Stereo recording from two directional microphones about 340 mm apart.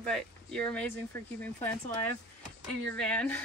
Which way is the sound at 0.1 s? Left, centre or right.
Centre.